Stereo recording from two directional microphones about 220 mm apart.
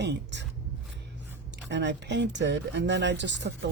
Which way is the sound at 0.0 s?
50° right (ahead or behind).